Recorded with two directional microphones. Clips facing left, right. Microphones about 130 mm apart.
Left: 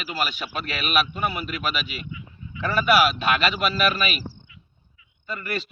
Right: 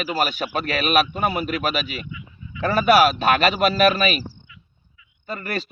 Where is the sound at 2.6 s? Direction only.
40° right (ahead or behind).